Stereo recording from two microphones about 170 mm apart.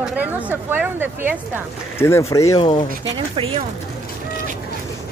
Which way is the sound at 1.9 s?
15° left (ahead or behind).